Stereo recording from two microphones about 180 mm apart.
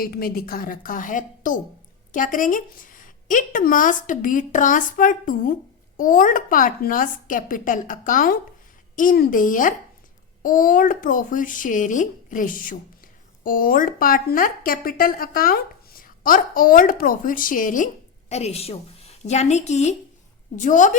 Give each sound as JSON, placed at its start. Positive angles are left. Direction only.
{"t": 0.0, "sound": "speech", "side_deg": 55}
{"t": 18.3, "sound": "a woman's voice", "side_deg": 35}